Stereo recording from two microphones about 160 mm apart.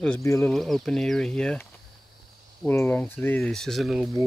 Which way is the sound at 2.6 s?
10° left (ahead or behind).